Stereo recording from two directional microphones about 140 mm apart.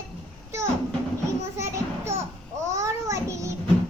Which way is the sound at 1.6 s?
20° right (ahead or behind).